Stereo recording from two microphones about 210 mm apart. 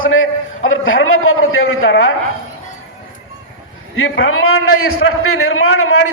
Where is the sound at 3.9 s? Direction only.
75° left (ahead or behind).